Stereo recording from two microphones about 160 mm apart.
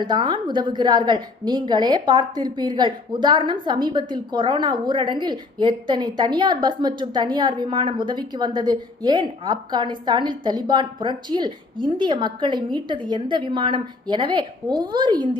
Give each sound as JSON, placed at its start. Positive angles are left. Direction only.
{"t": 0.0, "sound": "a woman's voice", "side_deg": -30}